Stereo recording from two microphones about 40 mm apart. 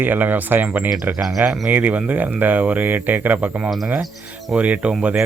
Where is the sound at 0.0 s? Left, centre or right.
Right.